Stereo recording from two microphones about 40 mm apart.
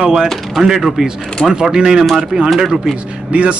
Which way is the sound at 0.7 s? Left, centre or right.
Centre.